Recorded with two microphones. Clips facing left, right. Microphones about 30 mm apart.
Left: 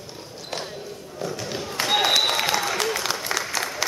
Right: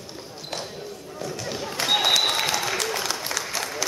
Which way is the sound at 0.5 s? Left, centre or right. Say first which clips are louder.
Left 1 dB; centre.